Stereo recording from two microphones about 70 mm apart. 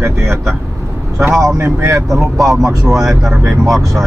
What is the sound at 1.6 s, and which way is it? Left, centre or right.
Speech, right.